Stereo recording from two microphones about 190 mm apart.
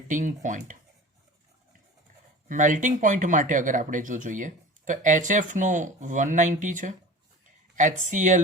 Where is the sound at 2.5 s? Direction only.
45° right (ahead or behind).